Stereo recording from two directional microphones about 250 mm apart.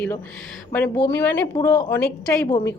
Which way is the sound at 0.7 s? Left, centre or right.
Centre.